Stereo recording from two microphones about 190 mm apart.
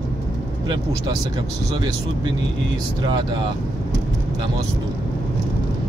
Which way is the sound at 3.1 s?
25° right (ahead or behind).